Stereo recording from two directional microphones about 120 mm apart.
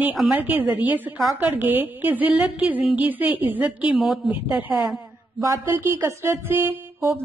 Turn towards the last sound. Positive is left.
turn(degrees=-20)  # may be behind; listen again after turning